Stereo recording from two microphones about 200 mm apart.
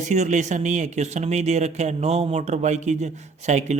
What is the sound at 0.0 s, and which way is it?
Speech, 35° right (ahead or behind).